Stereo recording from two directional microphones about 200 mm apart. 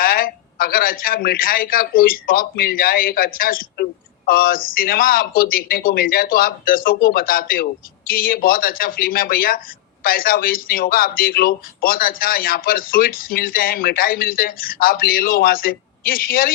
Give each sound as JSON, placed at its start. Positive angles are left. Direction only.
{"t": 0.0, "sound": "a man's voice", "side_deg": 45}